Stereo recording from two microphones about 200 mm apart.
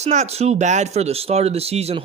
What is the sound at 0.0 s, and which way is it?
Speech, 35° right (ahead or behind).